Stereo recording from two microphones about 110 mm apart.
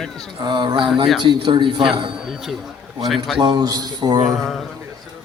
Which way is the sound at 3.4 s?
40° right (ahead or behind).